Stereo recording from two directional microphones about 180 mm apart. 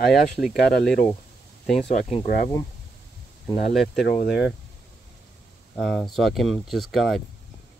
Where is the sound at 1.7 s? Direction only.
Centre (ahead or behind).